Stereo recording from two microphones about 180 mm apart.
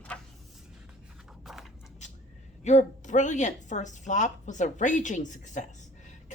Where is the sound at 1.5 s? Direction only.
Centre (ahead or behind).